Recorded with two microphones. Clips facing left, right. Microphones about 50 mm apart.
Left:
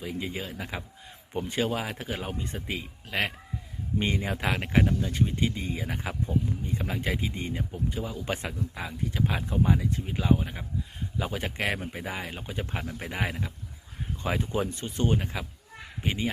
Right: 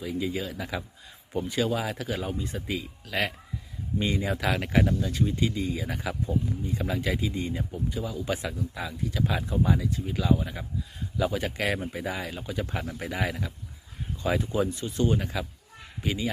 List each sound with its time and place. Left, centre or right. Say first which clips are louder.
0.0 s speech: right 3 dB; left
5.1 s speech: right 1 dB; left